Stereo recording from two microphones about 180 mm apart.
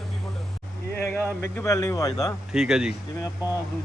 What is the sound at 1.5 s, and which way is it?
Speech, 15° left (ahead or behind).